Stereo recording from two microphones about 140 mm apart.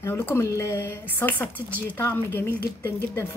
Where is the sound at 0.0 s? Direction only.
15° left (ahead or behind).